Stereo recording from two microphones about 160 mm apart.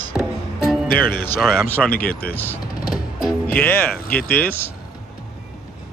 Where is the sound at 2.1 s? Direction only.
70° left (ahead or behind).